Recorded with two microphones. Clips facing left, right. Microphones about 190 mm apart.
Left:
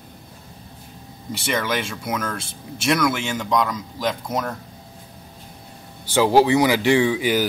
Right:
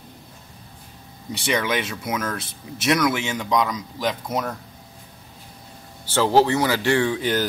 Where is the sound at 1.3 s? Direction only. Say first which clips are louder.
Right 1 dB; centre (ahead or behind).